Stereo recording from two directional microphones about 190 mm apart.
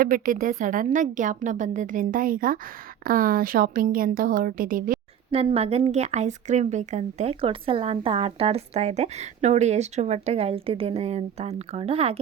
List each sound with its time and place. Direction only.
0.0 s a woman's voice: 45° right (ahead or behind)
5.3 s a woman's voice: 30° right (ahead or behind)